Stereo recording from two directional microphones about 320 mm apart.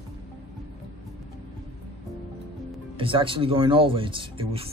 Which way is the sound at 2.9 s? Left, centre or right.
Centre.